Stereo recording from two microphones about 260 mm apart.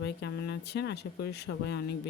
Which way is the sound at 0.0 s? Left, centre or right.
Left.